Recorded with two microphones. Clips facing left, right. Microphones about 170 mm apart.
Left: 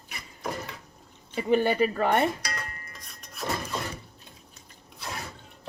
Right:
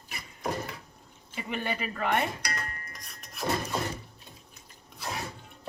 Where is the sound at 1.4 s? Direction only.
35° left (ahead or behind).